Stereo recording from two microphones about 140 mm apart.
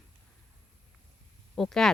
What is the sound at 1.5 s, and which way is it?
Speech, 5° left (ahead or behind).